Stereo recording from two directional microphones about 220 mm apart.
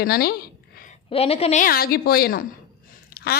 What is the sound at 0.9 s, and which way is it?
Speech, 25° left (ahead or behind).